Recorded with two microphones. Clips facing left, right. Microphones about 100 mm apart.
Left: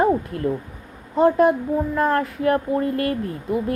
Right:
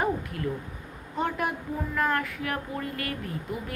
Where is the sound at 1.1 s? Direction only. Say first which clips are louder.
Left 13 dB; 35° left (ahead or behind).